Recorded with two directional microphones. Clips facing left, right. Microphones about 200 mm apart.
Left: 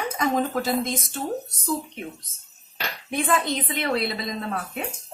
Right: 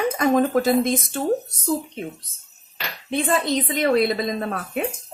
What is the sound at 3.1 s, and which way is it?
Speech, 30° right (ahead or behind).